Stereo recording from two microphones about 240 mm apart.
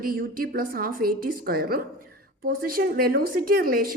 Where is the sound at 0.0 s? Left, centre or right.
Right.